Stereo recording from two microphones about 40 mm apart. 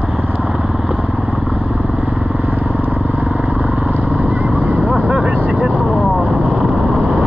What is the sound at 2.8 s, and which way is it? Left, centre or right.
Vehicle, right.